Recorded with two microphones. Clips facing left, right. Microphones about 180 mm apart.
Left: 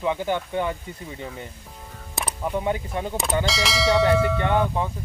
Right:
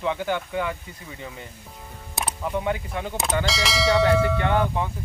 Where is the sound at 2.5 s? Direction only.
20° left (ahead or behind).